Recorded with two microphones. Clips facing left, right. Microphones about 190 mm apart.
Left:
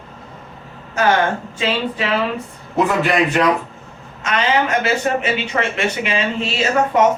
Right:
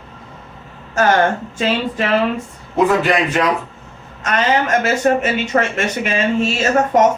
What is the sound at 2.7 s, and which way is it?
Speech, centre (ahead or behind).